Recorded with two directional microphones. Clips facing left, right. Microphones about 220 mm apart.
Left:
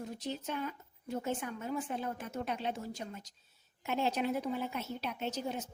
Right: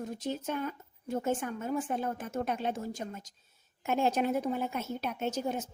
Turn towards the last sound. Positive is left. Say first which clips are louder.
# right 4 dB
turn(degrees=-50)  # may be behind; listen again after turning